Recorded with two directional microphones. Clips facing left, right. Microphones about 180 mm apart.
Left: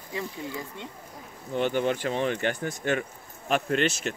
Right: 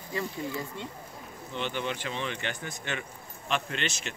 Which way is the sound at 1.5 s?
45° left (ahead or behind).